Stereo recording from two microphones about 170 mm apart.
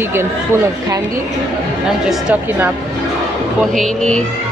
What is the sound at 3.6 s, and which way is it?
Speech, centre (ahead or behind).